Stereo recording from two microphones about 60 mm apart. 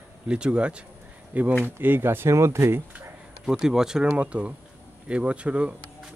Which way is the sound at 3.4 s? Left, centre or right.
Centre.